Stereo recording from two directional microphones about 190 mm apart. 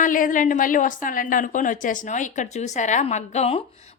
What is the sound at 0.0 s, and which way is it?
A woman's voice, 45° left (ahead or behind).